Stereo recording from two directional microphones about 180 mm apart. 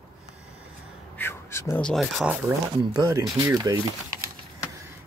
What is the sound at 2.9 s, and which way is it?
Speech, 20° right (ahead or behind).